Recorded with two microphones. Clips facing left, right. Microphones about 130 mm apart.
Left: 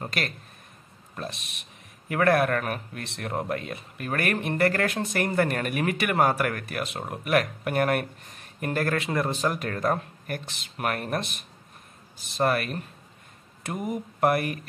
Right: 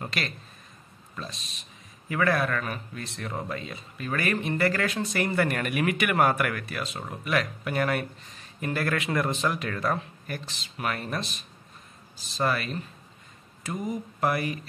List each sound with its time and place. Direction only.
1.1 s speech: 65° left (ahead or behind); by 6.6 s 35° left (ahead or behind)
6.7 s speech: 55° left (ahead or behind); by 9.5 s 35° left (ahead or behind)
9.5 s speech: 45° left (ahead or behind)